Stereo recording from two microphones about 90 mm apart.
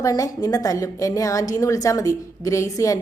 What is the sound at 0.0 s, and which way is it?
A woman's voice, 40° left (ahead or behind).